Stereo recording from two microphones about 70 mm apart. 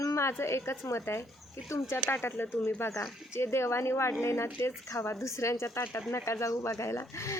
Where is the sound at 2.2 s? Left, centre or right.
Left.